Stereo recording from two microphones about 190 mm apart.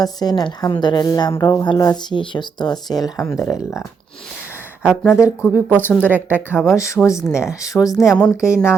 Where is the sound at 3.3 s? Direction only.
Centre (ahead or behind).